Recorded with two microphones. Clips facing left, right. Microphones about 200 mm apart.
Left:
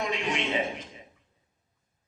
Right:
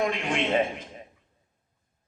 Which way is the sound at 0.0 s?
50° right (ahead or behind).